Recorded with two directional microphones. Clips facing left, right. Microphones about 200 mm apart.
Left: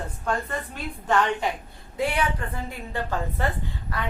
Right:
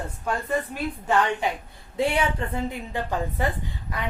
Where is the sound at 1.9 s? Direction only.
25° right (ahead or behind).